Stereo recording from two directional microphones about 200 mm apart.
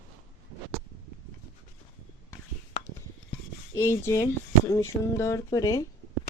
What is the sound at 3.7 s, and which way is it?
Speech, 15° left (ahead or behind).